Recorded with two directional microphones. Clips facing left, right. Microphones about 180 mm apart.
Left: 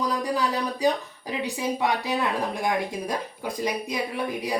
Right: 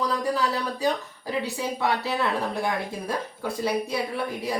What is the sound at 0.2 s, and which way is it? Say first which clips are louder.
A woman's voice: even; 15° left (ahead or behind).